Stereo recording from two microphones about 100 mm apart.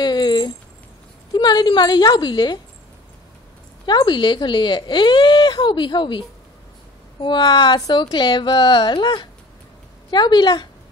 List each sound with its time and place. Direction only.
0.0 s a sound: 45° left (ahead or behind)
1.3 s speech: 45° left (ahead or behind)
3.8 s speech: 50° left (ahead or behind)